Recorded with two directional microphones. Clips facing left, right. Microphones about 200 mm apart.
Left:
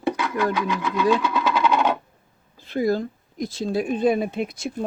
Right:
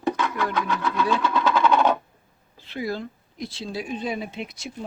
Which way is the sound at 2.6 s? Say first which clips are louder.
Left 7 dB; 45° left (ahead or behind).